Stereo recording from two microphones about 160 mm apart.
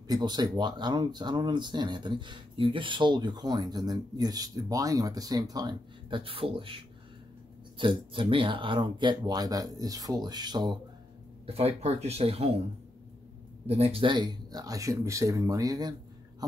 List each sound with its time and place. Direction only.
0.1 s speech: 25° right (ahead or behind)
11.4 s speech: 40° right (ahead or behind)
13.7 s speech: 40° right (ahead or behind); by 15.9 s 25° right (ahead or behind)